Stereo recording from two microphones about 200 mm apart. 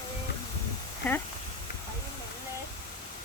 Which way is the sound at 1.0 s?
10° left (ahead or behind).